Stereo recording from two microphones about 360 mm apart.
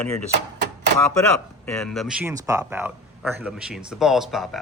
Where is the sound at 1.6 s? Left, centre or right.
Centre.